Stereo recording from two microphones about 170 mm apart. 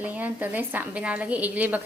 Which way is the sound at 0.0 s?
10° right (ahead or behind).